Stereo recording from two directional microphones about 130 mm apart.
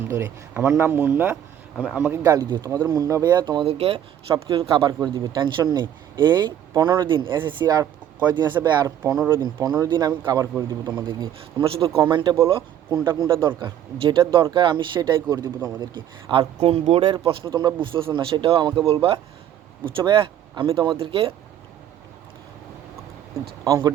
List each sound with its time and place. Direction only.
0.0 s speech: 20° right (ahead or behind)
2.2 s speech: 25° right (ahead or behind)
3.7 s speech: 50° right (ahead or behind); by 7.9 s 30° right (ahead or behind)
8.6 s speech: 20° right (ahead or behind)
11.0 s speech: 40° right (ahead or behind)
16.6 s speech: 55° right (ahead or behind)
17.5 s speech: 30° right (ahead or behind)
23.6 s speech: 25° right (ahead or behind)